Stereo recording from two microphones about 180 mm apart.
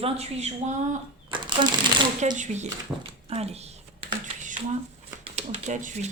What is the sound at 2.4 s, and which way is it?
A woman's voice, 40° right (ahead or behind).